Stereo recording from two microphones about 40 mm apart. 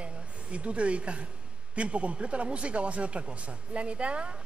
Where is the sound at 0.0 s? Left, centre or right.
Right.